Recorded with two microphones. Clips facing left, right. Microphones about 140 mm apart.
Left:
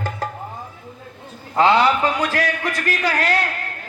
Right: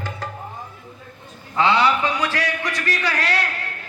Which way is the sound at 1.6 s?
45° left (ahead or behind).